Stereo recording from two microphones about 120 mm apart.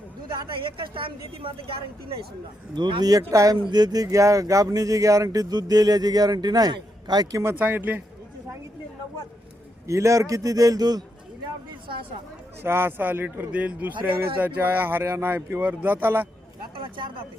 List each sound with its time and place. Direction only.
0.3 s a woman's voice: 45° right (ahead or behind)
2.7 s speech: 40° right (ahead or behind)
7.6 s speech: 15° right (ahead or behind)
9.8 s a man's voice: 25° right (ahead or behind)
12.6 s speech: 20° right (ahead or behind)